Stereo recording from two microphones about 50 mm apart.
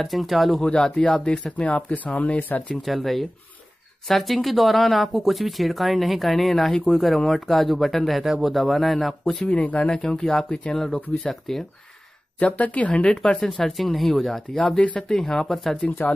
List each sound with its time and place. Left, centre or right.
0.0 s speech: centre
0.6 s speech: centre
1.2 s speech: left
2.7 s speech: centre
9.5 s speech: left
10.0 s speech: centre
12.4 s speech: left
13.0 s speech: centre
13.5 s speech: centre
15.8 s speech: left